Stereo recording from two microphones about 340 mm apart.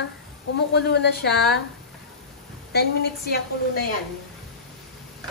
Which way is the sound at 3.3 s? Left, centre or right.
Left.